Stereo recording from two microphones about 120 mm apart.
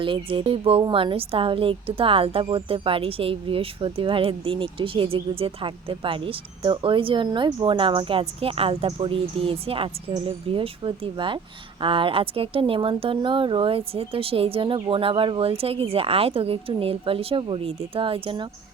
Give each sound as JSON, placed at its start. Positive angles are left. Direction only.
{"t": 0.0, "sound": "a woman's voice", "side_deg": -45}